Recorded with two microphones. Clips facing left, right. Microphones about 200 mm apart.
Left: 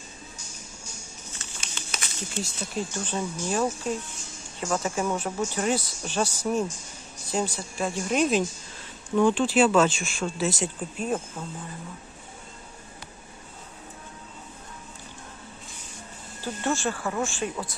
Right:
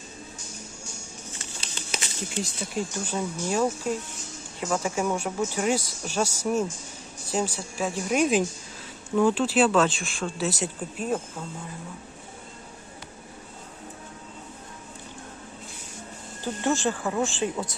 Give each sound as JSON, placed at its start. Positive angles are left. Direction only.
{"t": 1.9, "sound": "a sound", "side_deg": -25}
{"t": 3.0, "sound": "speech", "side_deg": -10}
{"t": 16.4, "sound": "speech", "side_deg": -15}